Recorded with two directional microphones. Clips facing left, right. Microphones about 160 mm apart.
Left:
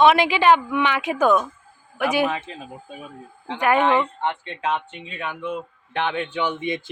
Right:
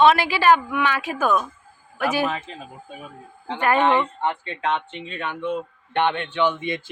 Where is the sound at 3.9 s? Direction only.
Centre (ahead or behind).